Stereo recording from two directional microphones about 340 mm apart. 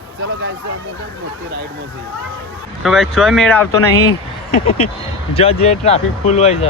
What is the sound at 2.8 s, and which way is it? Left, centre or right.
Speech, centre.